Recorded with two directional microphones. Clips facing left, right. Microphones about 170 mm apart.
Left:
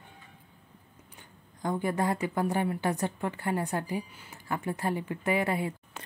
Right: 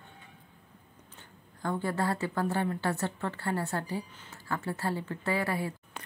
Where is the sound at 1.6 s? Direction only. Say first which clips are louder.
Left 2 dB; 15° left (ahead or behind).